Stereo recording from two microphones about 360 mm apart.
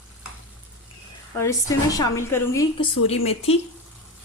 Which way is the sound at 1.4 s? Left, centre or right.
Centre.